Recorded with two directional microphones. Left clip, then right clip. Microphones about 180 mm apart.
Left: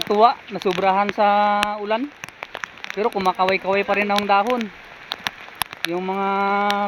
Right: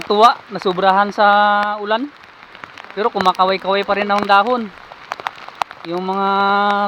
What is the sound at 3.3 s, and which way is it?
Speech, 15° left (ahead or behind).